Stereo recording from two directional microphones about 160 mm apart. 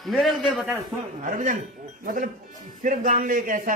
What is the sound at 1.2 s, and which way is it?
Speech, 55° right (ahead or behind).